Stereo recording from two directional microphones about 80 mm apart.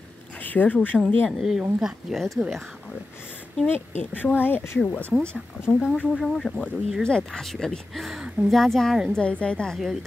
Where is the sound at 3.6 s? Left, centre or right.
Left.